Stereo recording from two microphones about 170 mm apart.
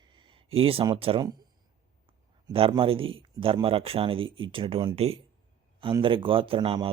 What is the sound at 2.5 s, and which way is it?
Speech, 30° right (ahead or behind).